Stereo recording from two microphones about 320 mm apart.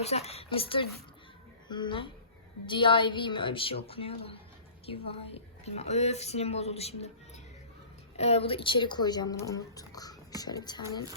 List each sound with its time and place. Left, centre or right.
0.0 s a woman's voice: centre
8.1 s speech: centre